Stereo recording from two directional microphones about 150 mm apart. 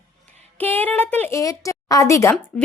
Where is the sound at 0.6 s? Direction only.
10° left (ahead or behind).